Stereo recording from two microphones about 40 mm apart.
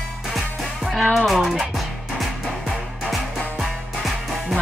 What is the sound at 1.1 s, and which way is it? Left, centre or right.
Music, centre.